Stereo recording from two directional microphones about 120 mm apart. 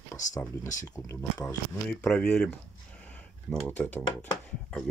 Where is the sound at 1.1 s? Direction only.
25° left (ahead or behind).